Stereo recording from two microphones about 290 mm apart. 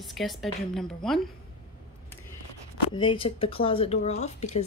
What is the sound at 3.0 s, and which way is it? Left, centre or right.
Speech, centre.